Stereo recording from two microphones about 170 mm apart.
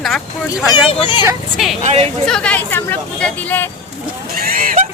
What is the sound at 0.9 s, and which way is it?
Speech, 30° left (ahead or behind).